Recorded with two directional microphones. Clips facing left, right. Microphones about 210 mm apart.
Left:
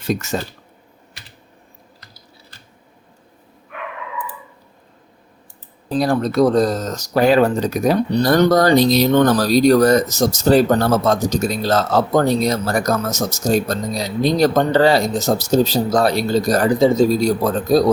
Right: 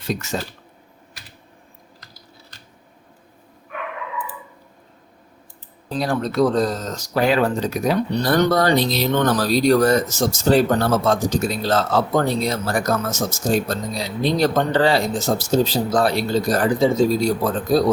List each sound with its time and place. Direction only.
6.0 s speech: 40° left (ahead or behind)